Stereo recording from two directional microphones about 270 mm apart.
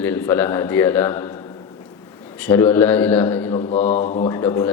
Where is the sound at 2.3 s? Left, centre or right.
Centre.